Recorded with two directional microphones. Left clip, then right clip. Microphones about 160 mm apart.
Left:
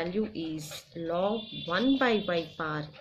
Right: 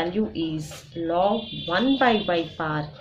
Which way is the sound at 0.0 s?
30° left (ahead or behind).